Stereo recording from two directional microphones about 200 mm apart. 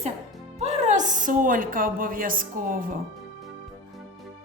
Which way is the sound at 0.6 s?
35° right (ahead or behind).